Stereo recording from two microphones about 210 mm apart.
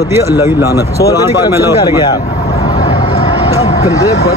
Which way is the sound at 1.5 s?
15° right (ahead or behind).